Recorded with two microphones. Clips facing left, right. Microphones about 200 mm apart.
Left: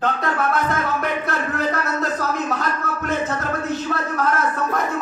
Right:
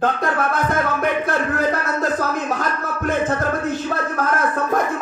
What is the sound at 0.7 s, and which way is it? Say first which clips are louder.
Speech: right 3 dB; 50° right (ahead or behind).